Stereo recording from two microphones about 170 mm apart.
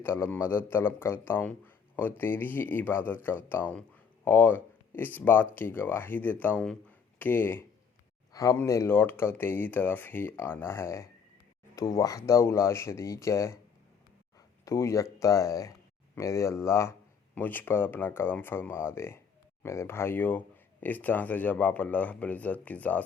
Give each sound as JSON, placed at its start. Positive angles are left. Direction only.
{"t": 0.0, "sound": "a man's voice", "side_deg": 15}
{"t": 14.6, "sound": "a man's voice", "side_deg": 15}